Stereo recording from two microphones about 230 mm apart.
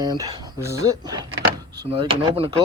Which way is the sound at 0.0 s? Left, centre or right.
Centre.